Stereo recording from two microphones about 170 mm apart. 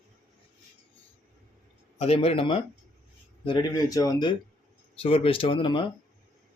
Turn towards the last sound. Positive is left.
turn(degrees=30)  # may be behind; listen again after turning